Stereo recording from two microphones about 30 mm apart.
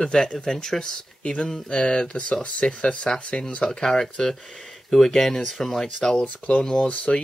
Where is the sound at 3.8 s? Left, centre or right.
Centre.